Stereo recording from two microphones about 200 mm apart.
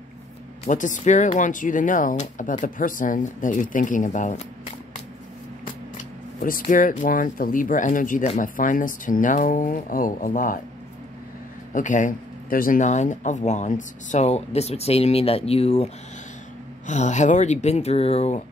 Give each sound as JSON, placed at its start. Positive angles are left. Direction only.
{"t": 0.7, "sound": "speech", "side_deg": 40}
{"t": 6.4, "sound": "speech", "side_deg": 45}
{"t": 11.7, "sound": "speech", "side_deg": 40}